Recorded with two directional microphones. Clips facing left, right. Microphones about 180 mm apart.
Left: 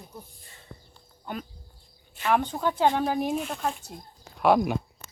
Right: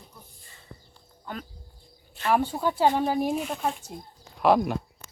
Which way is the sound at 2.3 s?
5° right (ahead or behind).